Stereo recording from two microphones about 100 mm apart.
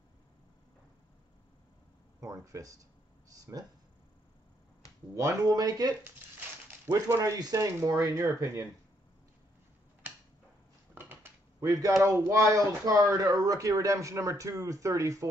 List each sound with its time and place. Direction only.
2.1 s speech: 35° right (ahead or behind)
5.1 s speech: 35° right (ahead or behind)
6.9 s speech: 30° right (ahead or behind)
11.0 s dishes: 20° right (ahead or behind)
11.6 s speech: 35° right (ahead or behind)